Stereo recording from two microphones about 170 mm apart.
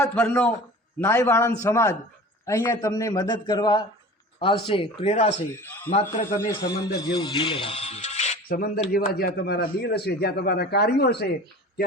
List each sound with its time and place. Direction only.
0.0 s a man's voice: 10° left (ahead or behind); by 5.3 s 40° left (ahead or behind)
5.5 s a man's voice: 15° left (ahead or behind)
5.9 s a man's voice: 45° left (ahead or behind)
6.6 s speech: 25° left (ahead or behind)
8.4 s speech: 60° left (ahead or behind)